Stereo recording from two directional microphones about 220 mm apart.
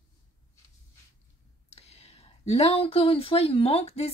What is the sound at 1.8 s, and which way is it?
Speech, 25° left (ahead or behind).